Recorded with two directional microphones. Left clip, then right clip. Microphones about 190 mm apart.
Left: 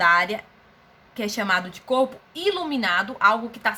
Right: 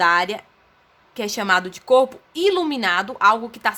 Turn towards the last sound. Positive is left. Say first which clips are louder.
# right 3 dB
turn(degrees=-60)  # may be behind; listen again after turning